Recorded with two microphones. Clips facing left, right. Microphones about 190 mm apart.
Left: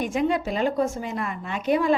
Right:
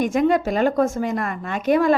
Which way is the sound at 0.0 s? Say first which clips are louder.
Right 5 dB; 45° right (ahead or behind).